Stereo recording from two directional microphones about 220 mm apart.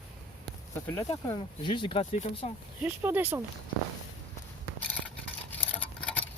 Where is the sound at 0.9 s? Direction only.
20° left (ahead or behind).